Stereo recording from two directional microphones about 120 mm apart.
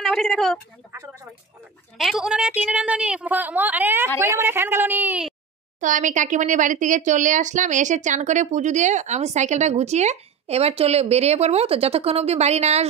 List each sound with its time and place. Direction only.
0.0 s speech: centre (ahead or behind)
2.0 s a woman's voice: centre (ahead or behind)
5.8 s speech: 90° right; by 12.8 s 65° right (ahead or behind)